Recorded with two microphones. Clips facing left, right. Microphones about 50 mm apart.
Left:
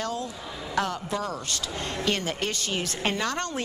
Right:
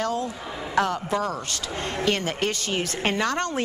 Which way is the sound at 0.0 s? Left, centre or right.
Right.